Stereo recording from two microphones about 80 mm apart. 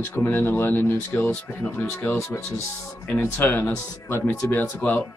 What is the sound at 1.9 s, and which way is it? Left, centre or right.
Speech, centre.